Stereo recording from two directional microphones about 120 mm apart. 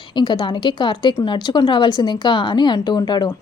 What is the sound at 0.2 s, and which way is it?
Speech, 40° left (ahead or behind).